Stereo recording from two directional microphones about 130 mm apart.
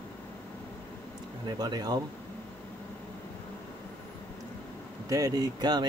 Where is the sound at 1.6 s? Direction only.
30° right (ahead or behind).